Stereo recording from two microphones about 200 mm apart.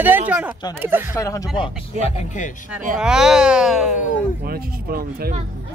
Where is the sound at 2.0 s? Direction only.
35° left (ahead or behind).